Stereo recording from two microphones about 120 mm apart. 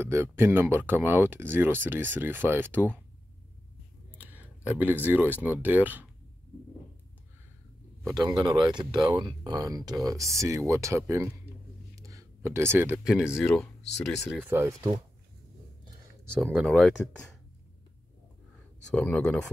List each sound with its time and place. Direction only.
0.0 s speech: 20° right (ahead or behind)
4.3 s speech: 15° right (ahead or behind)
8.0 s speech: 30° right (ahead or behind)
11.9 s a sound: 30° right (ahead or behind)
13.0 s speech: 5° right (ahead or behind)
14.4 s speech: 15° right (ahead or behind)
16.5 s speech: centre (ahead or behind)
18.9 s speech: 10° left (ahead or behind)